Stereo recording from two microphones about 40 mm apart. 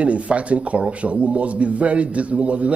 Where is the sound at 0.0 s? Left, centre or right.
Right.